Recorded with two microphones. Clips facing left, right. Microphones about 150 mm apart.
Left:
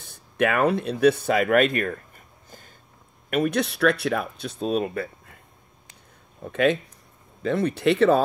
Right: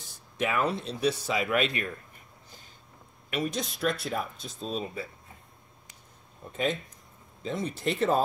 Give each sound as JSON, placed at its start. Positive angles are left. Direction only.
{"t": 0.0, "sound": "speech", "side_deg": 60}
{"t": 3.3, "sound": "speech", "side_deg": 55}
{"t": 6.4, "sound": "speech", "side_deg": 70}